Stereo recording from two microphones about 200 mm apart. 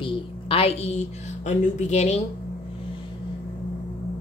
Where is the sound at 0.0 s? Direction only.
25° left (ahead or behind).